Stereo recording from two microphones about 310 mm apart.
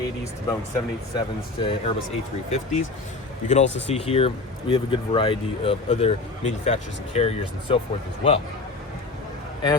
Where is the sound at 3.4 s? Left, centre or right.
Left.